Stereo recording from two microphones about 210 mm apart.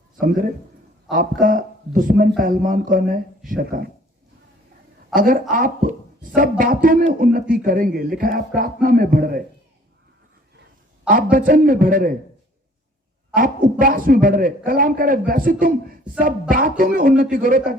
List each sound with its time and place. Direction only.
0.2 s a man's voice: 40° right (ahead or behind)
5.1 s a man's voice: 40° right (ahead or behind)
11.1 s a man's voice: 40° right (ahead or behind)
13.3 s a man's voice: 40° right (ahead or behind)